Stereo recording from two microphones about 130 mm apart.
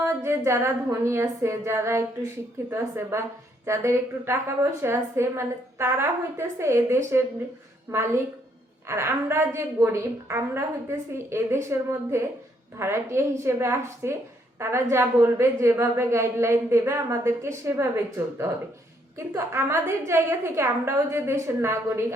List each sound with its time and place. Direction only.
0.0 s a woman's voice: 20° right (ahead or behind)